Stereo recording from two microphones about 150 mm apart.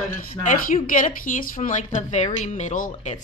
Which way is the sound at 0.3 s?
50° left (ahead or behind).